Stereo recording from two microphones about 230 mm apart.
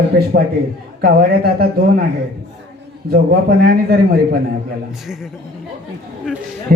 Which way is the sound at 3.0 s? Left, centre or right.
Right.